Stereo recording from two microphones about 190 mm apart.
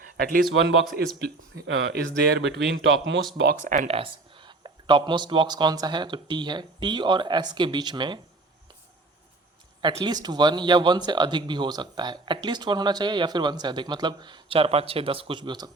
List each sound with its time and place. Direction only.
0.2 s speech: 50° right (ahead or behind)
0.9 s speech: 60° right (ahead or behind)
3.3 s speech: 55° right (ahead or behind)
3.6 s speech: 40° right (ahead or behind)
3.9 s speech: 25° right (ahead or behind)
9.8 s speech: 20° right (ahead or behind)